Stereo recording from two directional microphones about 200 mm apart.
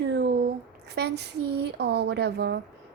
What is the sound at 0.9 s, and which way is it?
Speech, 55° right (ahead or behind).